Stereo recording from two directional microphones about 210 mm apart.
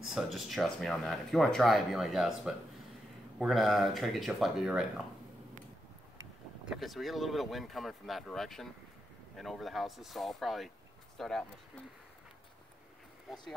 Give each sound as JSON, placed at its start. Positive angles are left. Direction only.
{"t": 0.0, "sound": "speech", "side_deg": 0}
{"t": 6.6, "sound": "speech", "side_deg": 0}